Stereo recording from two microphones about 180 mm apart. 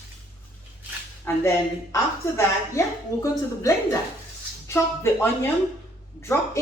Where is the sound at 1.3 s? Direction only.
15° left (ahead or behind).